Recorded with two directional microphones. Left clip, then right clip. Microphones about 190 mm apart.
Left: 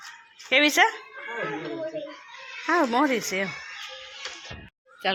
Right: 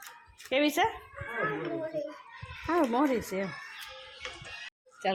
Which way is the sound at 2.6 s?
15° left (ahead or behind).